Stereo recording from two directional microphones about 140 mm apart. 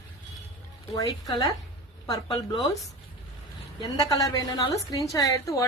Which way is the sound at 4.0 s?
25° left (ahead or behind).